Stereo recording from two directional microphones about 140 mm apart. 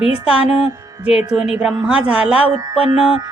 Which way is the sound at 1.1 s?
5° right (ahead or behind).